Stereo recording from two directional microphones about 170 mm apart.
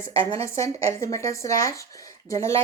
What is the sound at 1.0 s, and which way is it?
Speech, 20° left (ahead or behind).